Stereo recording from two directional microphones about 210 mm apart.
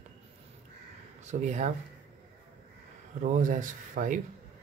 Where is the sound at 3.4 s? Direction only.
40° right (ahead or behind).